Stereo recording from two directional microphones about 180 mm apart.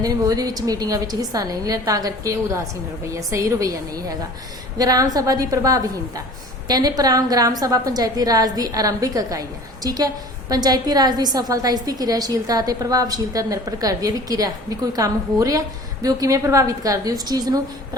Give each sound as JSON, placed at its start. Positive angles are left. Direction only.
{"t": 0.0, "sound": "a woman's voice", "side_deg": -20}